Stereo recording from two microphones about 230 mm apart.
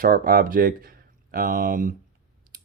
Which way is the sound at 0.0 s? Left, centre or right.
Right.